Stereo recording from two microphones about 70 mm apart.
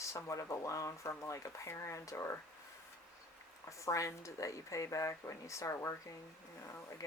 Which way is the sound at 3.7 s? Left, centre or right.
Left.